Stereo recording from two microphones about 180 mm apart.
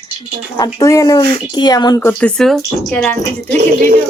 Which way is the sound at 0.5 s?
20° left (ahead or behind).